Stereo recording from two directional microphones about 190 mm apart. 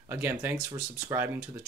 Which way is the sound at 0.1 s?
10° right (ahead or behind).